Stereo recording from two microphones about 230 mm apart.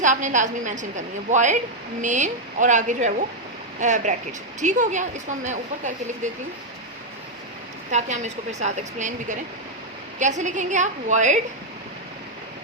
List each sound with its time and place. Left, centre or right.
0.0 s speech: right
7.9 s speech: right